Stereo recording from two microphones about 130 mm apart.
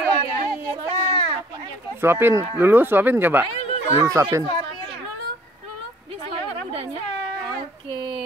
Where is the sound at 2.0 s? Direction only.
15° right (ahead or behind).